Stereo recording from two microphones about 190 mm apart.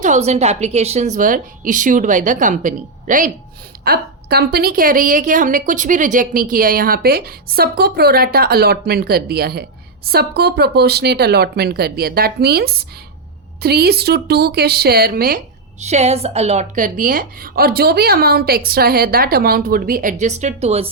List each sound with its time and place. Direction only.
0.0 s a woman's voice: 35° right (ahead or behind)
3.8 s a woman's voice: 55° right (ahead or behind)
15.8 s a woman's voice: 35° right (ahead or behind)